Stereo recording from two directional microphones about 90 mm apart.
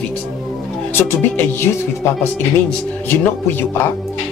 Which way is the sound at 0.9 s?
25° left (ahead or behind).